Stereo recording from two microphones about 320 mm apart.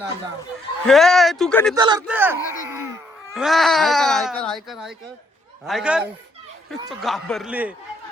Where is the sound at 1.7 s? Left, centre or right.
Centre.